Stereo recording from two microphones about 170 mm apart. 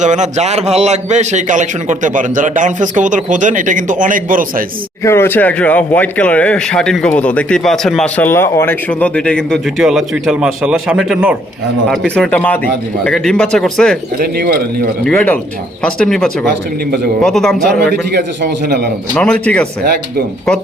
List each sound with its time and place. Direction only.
0.0 s a man's voice: 45° right (ahead or behind)
5.0 s speech: 15° left (ahead or behind)
14.2 s speech: 60° right (ahead or behind)
15.0 s speech: 5° left (ahead or behind)
18.1 s a man's voice: 75° right (ahead or behind)
19.1 s speech: 5° left (ahead or behind)